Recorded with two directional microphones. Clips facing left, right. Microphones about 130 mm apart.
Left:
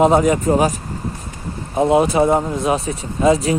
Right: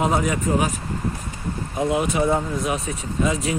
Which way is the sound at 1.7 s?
35° left (ahead or behind).